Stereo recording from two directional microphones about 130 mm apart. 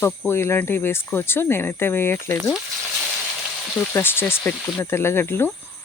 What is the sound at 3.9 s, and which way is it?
Speech, 15° left (ahead or behind).